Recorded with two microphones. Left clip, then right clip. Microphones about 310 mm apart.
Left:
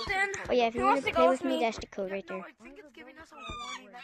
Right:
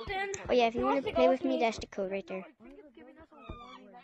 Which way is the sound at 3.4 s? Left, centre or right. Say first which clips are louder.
Left 9 dB; left.